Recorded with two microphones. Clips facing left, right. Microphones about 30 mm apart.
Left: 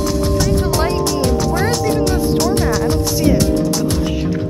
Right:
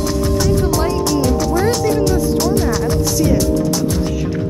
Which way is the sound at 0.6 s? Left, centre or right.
Left.